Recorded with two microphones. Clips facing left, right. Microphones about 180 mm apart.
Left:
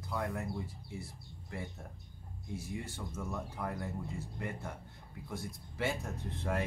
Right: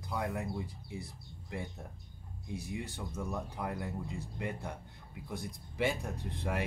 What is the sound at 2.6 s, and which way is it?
Speech, 15° right (ahead or behind).